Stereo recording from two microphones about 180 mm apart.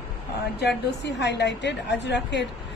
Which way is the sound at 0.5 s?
70° left (ahead or behind).